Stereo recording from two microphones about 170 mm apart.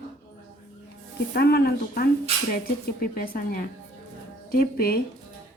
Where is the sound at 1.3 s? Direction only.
70° left (ahead or behind).